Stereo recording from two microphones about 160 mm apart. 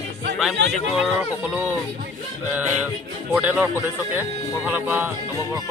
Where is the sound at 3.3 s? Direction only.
10° right (ahead or behind).